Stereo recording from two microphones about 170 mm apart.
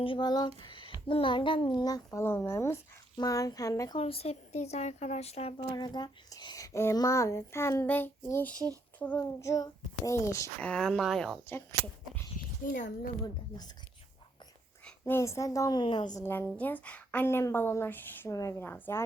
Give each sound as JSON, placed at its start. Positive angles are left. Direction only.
{"t": 0.0, "sound": "a child's voice", "side_deg": 30}
{"t": 0.6, "sound": "a sound", "side_deg": 30}
{"t": 1.0, "sound": "a child's voice", "side_deg": 30}
{"t": 3.9, "sound": "speech", "side_deg": 35}
{"t": 5.7, "sound": "speech", "side_deg": 25}
{"t": 12.7, "sound": "a child's voice", "side_deg": 50}
{"t": 14.8, "sound": "a child's voice", "side_deg": 10}